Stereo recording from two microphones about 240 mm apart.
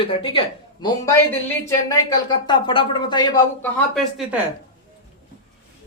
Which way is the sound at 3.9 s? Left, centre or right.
Centre.